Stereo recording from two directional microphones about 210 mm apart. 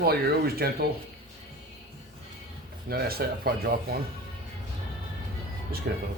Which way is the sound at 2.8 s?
45° right (ahead or behind).